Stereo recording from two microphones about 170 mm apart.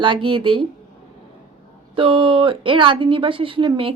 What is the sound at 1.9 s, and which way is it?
Speech, 30° right (ahead or behind).